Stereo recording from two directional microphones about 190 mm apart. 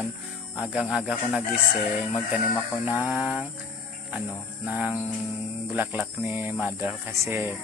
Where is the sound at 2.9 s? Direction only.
5° right (ahead or behind).